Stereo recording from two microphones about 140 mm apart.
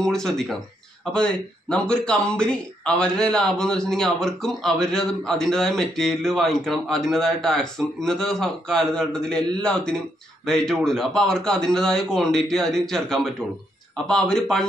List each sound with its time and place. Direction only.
0.0 s speech: 5° left (ahead or behind)